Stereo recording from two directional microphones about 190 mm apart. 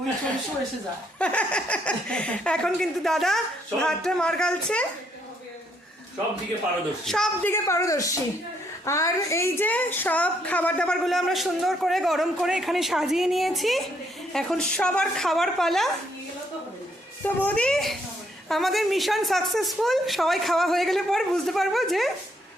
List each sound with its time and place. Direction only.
1.2 s a woman's voice: 5° left (ahead or behind)
7.0 s a woman's voice: centre (ahead or behind)
7.5 s a woman's voice: 15° left (ahead or behind)
17.2 s a woman's voice: 5° left (ahead or behind)